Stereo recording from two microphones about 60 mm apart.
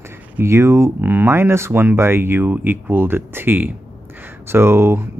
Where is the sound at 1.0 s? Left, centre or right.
Right.